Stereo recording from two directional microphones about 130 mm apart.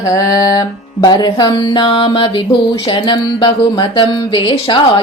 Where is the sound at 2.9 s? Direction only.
40° left (ahead or behind).